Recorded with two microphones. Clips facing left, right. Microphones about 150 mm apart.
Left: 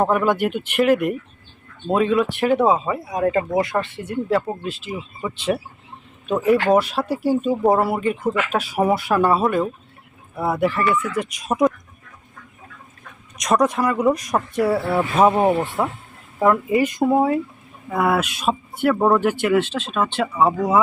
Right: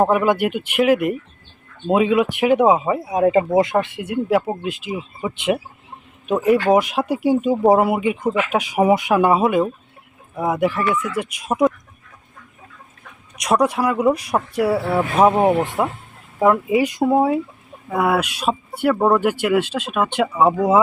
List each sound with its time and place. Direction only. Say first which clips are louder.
0.0 s speech: right 2 dB; 5° right (ahead or behind)
10.3 s speech: right 1 dB; 15° right (ahead or behind)
13.4 s speech: right 1 dB; 10° right (ahead or behind)